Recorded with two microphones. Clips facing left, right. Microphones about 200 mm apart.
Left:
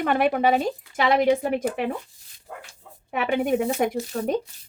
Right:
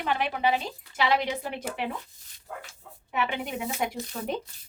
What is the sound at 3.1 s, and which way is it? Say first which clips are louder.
Speech: left 8 dB; 50° left (ahead or behind).